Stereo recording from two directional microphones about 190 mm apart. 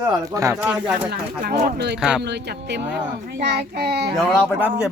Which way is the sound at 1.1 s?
55° right (ahead or behind).